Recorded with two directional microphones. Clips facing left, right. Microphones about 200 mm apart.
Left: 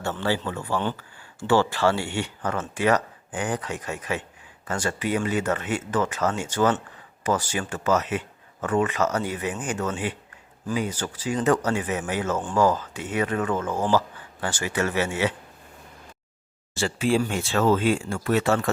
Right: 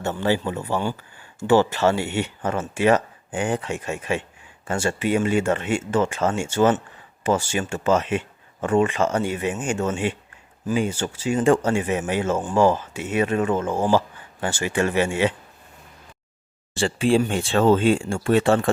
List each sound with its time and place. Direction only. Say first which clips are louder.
0.0 s a man's voice: right 4 dB; 15° right (ahead or behind)
16.7 s speech: right 4 dB; 30° right (ahead or behind)